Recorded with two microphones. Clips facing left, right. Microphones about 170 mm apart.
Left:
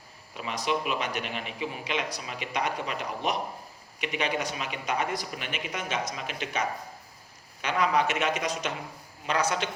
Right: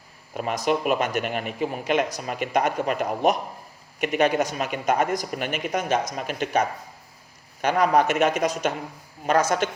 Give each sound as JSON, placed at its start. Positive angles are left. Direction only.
{"t": 0.3, "sound": "speech", "side_deg": -45}